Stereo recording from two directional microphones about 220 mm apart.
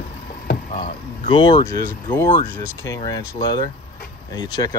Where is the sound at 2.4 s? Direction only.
40° right (ahead or behind).